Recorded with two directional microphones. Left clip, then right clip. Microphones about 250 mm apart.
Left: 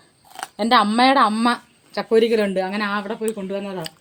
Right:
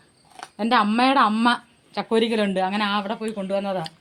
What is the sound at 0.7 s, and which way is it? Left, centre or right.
Speech, centre.